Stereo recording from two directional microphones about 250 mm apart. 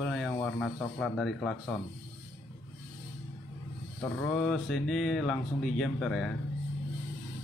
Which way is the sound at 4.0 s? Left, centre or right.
Centre.